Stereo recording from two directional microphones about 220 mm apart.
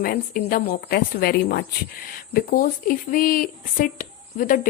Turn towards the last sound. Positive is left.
turn(degrees=40)  # may be behind; listen again after turning